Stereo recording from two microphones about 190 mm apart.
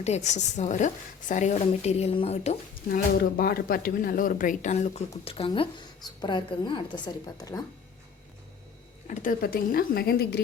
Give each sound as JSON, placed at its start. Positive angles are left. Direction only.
{"t": 0.0, "sound": "speech", "side_deg": 35}
{"t": 2.9, "sound": "speech", "side_deg": 50}
{"t": 9.0, "sound": "speech", "side_deg": 45}